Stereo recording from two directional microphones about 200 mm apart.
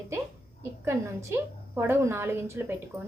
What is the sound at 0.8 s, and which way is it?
A woman's voice, 10° right (ahead or behind).